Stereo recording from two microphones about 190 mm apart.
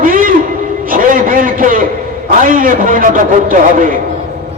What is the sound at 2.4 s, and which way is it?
A man's voice, 45° right (ahead or behind).